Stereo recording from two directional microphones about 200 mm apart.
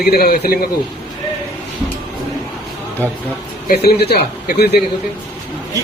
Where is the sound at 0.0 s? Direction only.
55° left (ahead or behind).